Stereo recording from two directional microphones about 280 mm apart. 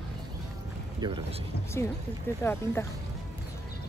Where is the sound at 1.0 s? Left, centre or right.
Centre.